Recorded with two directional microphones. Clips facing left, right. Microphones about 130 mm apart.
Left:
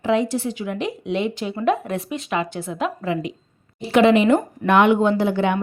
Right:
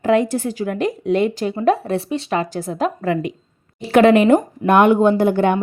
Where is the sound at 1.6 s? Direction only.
30° right (ahead or behind).